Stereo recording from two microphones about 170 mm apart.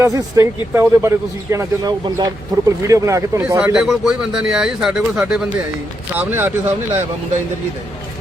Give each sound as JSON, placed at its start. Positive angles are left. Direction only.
{"t": 0.0, "sound": "a man's voice", "side_deg": -20}
{"t": 3.8, "sound": "a man's voice", "side_deg": -5}